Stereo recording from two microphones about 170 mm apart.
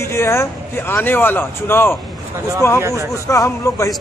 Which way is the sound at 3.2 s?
20° left (ahead or behind).